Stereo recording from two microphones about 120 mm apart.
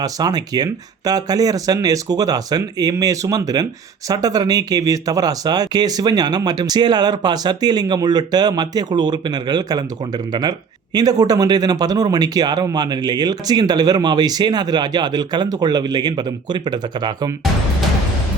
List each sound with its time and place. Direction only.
0.0 s speech: 35° right (ahead or behind)
10.9 s speech: 30° right (ahead or behind)